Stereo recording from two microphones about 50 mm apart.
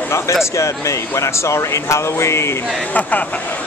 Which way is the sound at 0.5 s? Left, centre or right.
Left.